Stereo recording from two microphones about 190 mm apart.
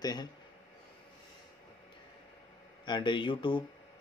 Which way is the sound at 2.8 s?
25° left (ahead or behind).